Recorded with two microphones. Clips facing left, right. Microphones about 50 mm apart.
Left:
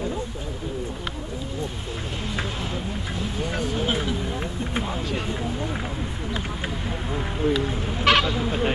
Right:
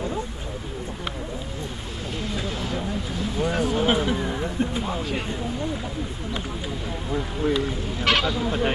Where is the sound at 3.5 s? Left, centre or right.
Centre.